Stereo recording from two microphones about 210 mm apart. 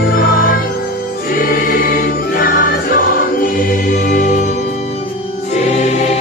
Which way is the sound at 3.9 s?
35° left (ahead or behind).